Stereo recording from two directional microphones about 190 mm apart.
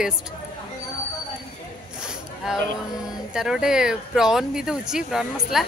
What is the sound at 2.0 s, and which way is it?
Zipper, 5° right (ahead or behind).